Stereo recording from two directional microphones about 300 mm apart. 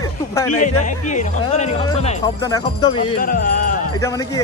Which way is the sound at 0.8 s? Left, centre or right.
Left.